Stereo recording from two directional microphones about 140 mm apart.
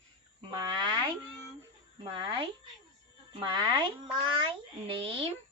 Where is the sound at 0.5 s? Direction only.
35° right (ahead or behind).